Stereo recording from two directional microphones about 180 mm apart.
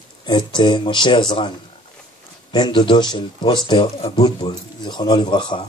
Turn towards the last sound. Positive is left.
turn(degrees=25)  # may be behind; listen again after turning